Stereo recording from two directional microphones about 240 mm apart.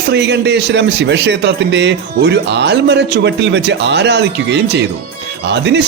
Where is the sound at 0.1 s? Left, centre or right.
Right.